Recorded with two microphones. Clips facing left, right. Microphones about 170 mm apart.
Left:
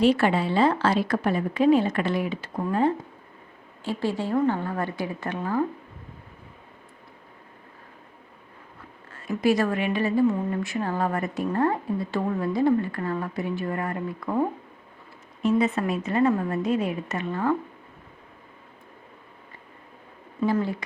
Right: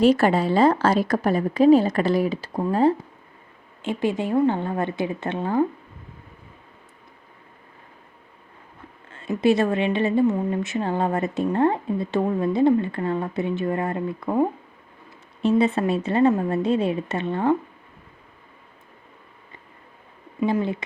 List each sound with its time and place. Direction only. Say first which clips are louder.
0.0 s a woman's voice: right 3 dB; 40° right (ahead or behind)
3.8 s speech: right 3 dB; 20° right (ahead or behind)
9.2 s speech: right 3 dB; 25° right (ahead or behind)
20.4 s speech: right 2 dB; 20° right (ahead or behind)